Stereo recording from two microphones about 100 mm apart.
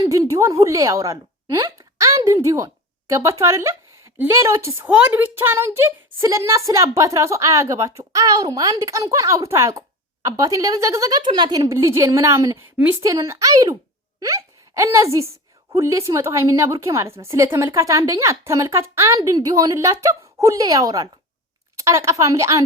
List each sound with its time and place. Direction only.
0.0 s a woman's voice: 30° right (ahead or behind)
4.9 s speech: 15° right (ahead or behind); by 11.2 s 35° right (ahead or behind)
11.2 s speech: 45° right (ahead or behind)
11.7 s a woman's voice: 30° right (ahead or behind)
12.7 s a woman's voice: 20° right (ahead or behind)
13.0 s a woman's voice: 30° right (ahead or behind)